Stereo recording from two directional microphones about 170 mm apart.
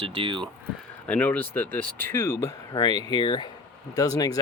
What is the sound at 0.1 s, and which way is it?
Speech, 30° right (ahead or behind).